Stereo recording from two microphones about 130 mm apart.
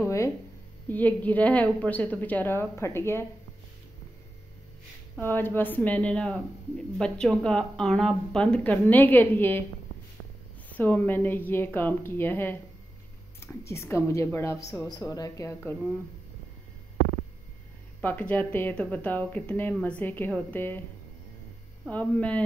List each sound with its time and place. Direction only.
0.8 s a woman's voice: 10° left (ahead or behind)
5.2 s a woman's voice: 15° left (ahead or behind)
10.7 s a woman's voice: 15° left (ahead or behind)
18.0 s a woman's voice: 15° left (ahead or behind)
21.8 s a woman's voice: 10° left (ahead or behind)